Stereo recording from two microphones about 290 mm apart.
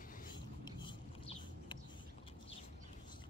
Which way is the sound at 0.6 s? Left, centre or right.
Centre.